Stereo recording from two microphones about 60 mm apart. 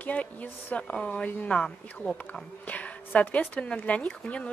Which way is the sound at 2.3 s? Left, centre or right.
Left.